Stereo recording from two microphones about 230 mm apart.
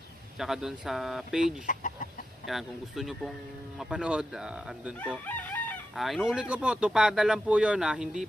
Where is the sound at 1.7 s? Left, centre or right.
Left.